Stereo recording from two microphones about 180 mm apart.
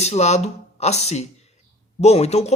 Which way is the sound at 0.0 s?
40° left (ahead or behind).